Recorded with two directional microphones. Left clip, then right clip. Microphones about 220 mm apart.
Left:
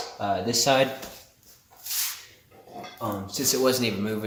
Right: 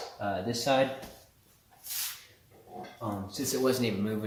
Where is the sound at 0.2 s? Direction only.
30° left (ahead or behind).